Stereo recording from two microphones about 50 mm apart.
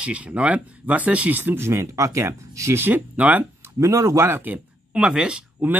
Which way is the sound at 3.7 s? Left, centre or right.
Right.